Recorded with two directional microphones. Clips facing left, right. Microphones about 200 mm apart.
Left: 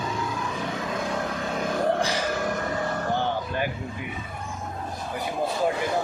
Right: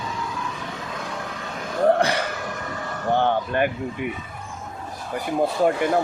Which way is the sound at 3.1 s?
60° right (ahead or behind).